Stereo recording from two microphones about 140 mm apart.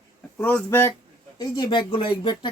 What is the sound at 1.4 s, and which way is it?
Speech, 30° left (ahead or behind).